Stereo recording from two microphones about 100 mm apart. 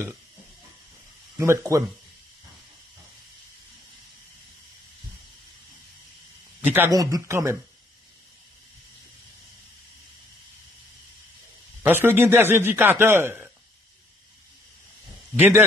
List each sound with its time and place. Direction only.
1.4 s a man's voice: 30° right (ahead or behind)
6.9 s speech: 35° right (ahead or behind)
11.8 s a man's voice: 20° right (ahead or behind)
15.3 s a man's voice: 20° right (ahead or behind)